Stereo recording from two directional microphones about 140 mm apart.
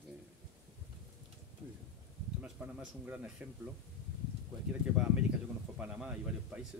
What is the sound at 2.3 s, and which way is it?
Speech, 10° right (ahead or behind).